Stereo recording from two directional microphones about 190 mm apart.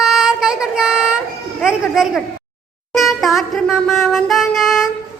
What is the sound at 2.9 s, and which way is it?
Music, centre (ahead or behind).